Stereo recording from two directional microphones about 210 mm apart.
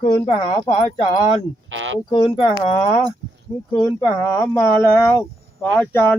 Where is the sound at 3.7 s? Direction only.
15° left (ahead or behind).